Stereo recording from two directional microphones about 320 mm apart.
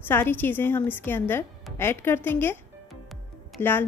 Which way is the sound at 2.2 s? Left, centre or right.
Centre.